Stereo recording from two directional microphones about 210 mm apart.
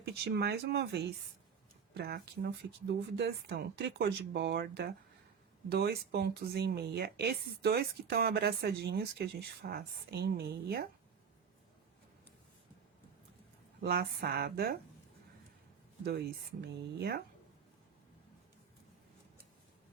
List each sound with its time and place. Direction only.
0.0 s speech: 50° right (ahead or behind)
13.8 s speech: 45° right (ahead or behind)
16.0 s speech: 50° right (ahead or behind)